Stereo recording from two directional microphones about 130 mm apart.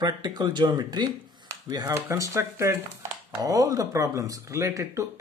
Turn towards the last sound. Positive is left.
turn(degrees=-25)  # may be behind; listen again after turning